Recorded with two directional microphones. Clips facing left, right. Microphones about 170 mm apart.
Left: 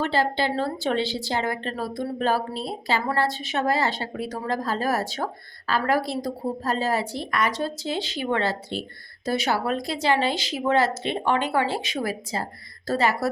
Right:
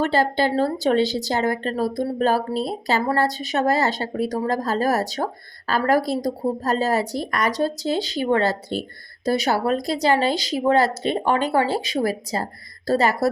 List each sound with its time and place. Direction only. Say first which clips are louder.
0.0 s speech: right 4 dB; 45° right (ahead or behind)